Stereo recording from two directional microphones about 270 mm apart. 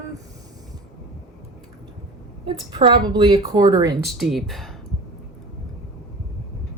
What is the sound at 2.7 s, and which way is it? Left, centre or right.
Speech, centre.